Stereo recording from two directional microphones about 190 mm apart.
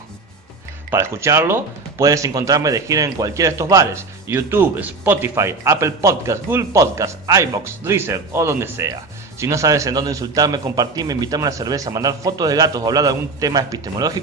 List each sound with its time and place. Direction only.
0.9 s a man's voice: 15° right (ahead or behind)